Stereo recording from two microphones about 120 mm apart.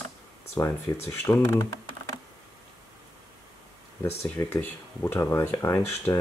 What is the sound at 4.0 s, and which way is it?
Speech, 25° left (ahead or behind).